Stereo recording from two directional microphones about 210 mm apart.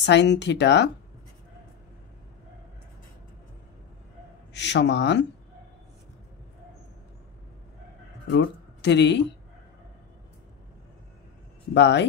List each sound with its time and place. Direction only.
0.0 s speech: 55° left (ahead or behind)
4.6 s speech: 55° left (ahead or behind)
8.3 s speech: 55° left (ahead or behind)
11.7 s speech: 55° left (ahead or behind)